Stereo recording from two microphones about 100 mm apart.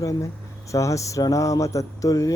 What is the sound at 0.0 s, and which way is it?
Speech, 35° left (ahead or behind).